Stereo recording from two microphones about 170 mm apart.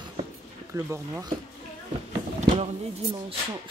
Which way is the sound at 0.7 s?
15° right (ahead or behind).